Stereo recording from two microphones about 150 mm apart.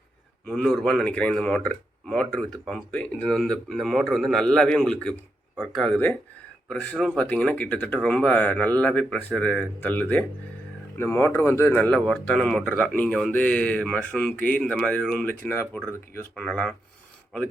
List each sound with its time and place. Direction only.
0.4 s speech: 5° left (ahead or behind)